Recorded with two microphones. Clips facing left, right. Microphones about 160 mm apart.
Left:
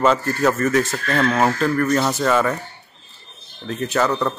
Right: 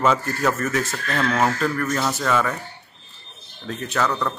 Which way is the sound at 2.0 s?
20° left (ahead or behind).